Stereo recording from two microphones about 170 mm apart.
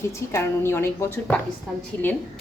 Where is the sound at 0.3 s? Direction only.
15° left (ahead or behind).